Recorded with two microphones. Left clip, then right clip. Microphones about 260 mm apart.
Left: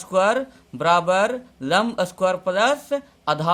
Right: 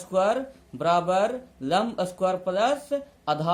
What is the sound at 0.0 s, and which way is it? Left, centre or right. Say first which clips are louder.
Speech: left 4 dB; left.